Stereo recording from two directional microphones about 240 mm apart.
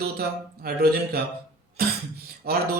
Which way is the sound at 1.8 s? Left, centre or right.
Right.